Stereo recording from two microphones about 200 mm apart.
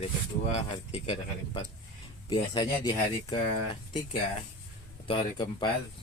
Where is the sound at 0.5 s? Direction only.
25° left (ahead or behind).